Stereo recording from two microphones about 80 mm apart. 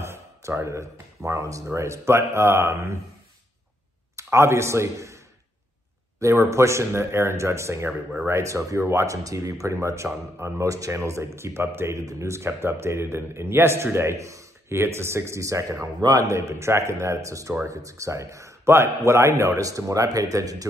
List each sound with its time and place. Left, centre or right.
0.0 s speech: right
4.2 s a man's voice: right
12.0 s a man's voice: right